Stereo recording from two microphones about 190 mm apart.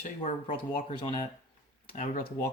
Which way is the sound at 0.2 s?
35° left (ahead or behind).